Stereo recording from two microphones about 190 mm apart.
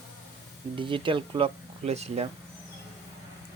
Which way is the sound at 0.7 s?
25° right (ahead or behind).